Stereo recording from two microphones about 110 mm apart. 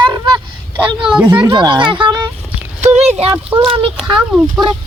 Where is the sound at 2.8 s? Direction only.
90° right.